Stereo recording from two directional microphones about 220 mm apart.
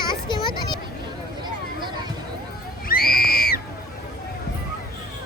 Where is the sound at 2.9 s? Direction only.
45° left (ahead or behind).